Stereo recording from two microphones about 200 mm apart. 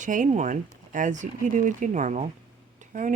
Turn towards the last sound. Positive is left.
turn(degrees=-40)  # may be behind; listen again after turning